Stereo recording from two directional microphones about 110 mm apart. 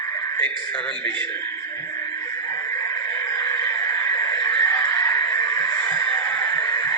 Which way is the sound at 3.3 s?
10° left (ahead or behind).